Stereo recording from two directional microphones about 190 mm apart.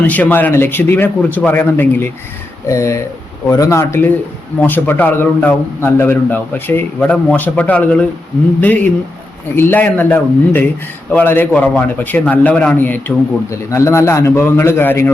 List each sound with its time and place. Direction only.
0.1 s a man's voice: 10° left (ahead or behind)